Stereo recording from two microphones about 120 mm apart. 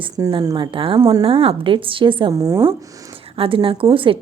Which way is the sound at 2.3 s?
25° right (ahead or behind).